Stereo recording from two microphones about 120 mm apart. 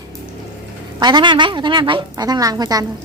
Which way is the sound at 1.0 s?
40° right (ahead or behind).